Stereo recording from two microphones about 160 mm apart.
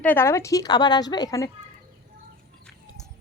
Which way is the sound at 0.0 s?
10° left (ahead or behind).